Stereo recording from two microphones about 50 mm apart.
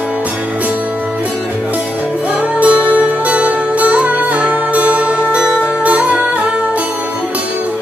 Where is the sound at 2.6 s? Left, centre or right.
Right.